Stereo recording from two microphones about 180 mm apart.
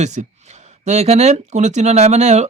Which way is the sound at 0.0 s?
40° right (ahead or behind).